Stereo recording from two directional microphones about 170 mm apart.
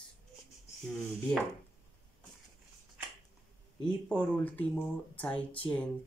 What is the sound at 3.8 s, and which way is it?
Speech, 5° left (ahead or behind).